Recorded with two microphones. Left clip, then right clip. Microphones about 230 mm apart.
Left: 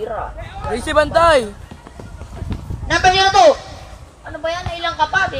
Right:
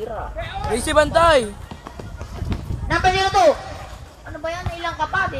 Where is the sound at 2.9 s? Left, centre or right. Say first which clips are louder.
Left 5 dB; left.